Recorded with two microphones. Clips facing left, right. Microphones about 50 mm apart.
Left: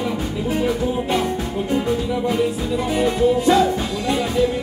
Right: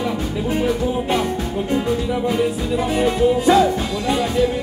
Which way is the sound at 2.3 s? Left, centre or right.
Centre.